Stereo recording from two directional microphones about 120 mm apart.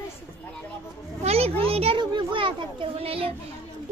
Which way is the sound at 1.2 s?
55° right (ahead or behind).